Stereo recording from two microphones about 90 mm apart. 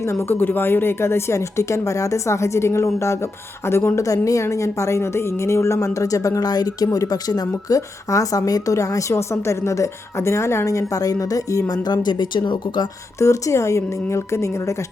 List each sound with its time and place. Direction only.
0.1 s a woman's voice: 25° left (ahead or behind); by 12.8 s 60° left (ahead or behind)
13.1 s a woman's voice: 35° left (ahead or behind)